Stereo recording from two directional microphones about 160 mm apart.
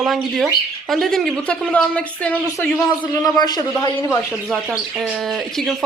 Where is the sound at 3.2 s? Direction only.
25° left (ahead or behind).